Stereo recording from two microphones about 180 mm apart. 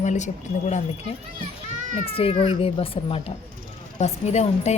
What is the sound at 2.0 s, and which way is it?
Speech, 30° left (ahead or behind).